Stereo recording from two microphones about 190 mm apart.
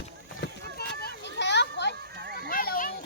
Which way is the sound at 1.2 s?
65° left (ahead or behind).